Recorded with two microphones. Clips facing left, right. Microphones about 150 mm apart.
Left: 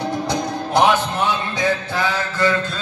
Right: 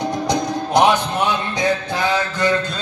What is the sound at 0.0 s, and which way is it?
Music, 15° right (ahead or behind).